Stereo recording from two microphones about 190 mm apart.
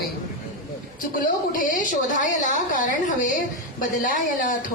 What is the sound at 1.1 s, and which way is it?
A woman's voice, 45° left (ahead or behind).